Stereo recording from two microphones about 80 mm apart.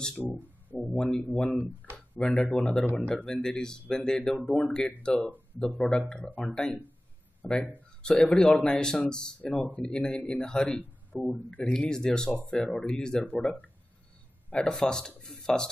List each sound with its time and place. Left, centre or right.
0.0 s speech: centre
14.6 s speech: centre